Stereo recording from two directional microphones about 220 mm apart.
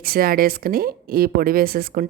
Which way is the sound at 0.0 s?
40° right (ahead or behind).